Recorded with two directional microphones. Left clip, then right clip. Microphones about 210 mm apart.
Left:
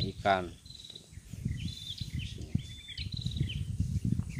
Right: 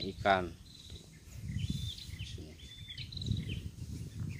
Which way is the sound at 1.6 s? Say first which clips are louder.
Left 2 dB; 55° left (ahead or behind).